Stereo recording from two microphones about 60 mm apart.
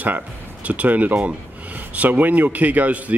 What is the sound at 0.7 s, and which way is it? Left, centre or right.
Speech, right.